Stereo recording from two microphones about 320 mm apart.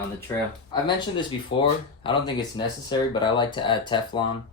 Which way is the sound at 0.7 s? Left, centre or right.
Centre.